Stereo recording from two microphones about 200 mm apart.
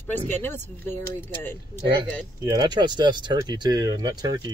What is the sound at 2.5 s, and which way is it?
Speech, 20° right (ahead or behind).